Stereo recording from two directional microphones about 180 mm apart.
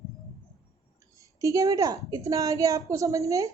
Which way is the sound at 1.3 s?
20° right (ahead or behind).